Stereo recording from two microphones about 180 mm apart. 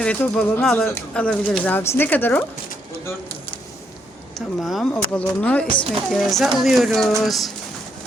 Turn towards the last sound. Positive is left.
turn(degrees=0)  # may be behind; listen again after turning